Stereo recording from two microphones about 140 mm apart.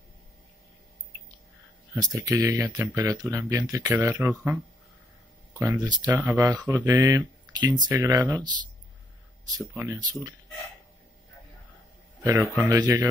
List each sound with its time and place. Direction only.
2.0 s speech: 25° right (ahead or behind)
9.6 s speech: 20° right (ahead or behind)
12.2 s a man's voice: 20° right (ahead or behind)